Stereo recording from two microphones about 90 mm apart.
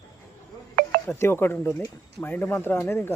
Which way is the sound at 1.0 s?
30° left (ahead or behind).